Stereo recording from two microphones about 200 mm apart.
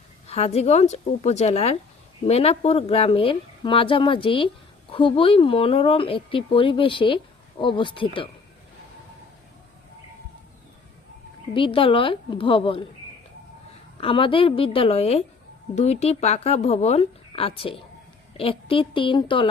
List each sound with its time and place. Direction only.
0.3 s speech: 30° left (ahead or behind)
11.5 s speech: 25° left (ahead or behind)
14.0 s speech: 25° left (ahead or behind)